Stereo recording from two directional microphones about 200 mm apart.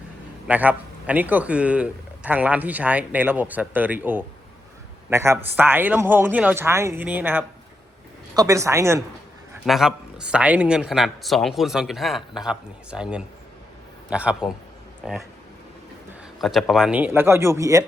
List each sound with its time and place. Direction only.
0.4 s a man's voice: 10° right (ahead or behind)
9.6 s speech: centre (ahead or behind)
16.4 s a man's voice: centre (ahead or behind); by 17.8 s 15° right (ahead or behind)